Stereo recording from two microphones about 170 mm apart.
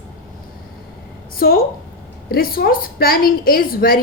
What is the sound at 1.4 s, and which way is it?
A woman's voice, 60° left (ahead or behind).